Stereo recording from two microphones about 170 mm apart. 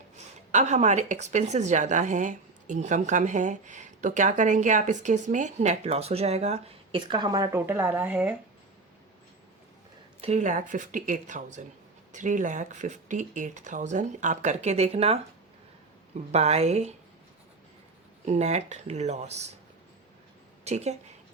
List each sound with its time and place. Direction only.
0.3 s a woman's voice: 45° right (ahead or behind); by 8.4 s 10° right (ahead or behind)
10.2 s a woman's voice: 40° right (ahead or behind)
16.3 s speech: 40° right (ahead or behind)
18.3 s speech: 40° right (ahead or behind)
20.7 s speech: 40° right (ahead or behind)